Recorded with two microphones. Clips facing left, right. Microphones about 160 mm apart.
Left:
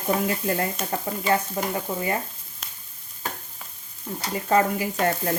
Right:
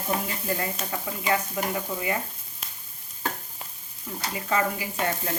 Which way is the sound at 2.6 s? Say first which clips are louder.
Even; centre (ahead or behind).